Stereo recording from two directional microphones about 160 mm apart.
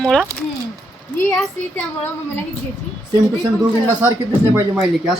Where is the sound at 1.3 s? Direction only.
Centre (ahead or behind).